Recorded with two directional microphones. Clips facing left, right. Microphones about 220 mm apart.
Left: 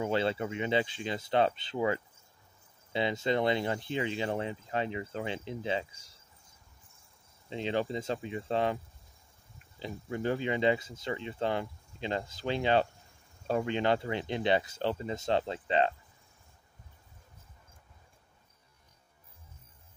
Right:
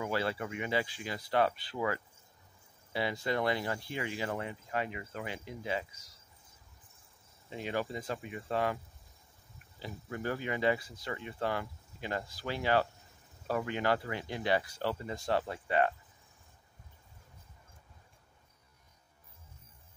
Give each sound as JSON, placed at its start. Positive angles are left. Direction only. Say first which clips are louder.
{"t": 0.0, "sound": "speech", "louder": "left 4 dB", "side_deg": 25}
{"t": 7.4, "sound": "speech", "louder": "left 4 dB", "side_deg": 25}
{"t": 9.8, "sound": "speech", "louder": "left 4 dB", "side_deg": 25}